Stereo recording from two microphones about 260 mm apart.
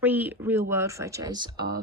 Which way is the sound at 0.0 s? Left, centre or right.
Centre.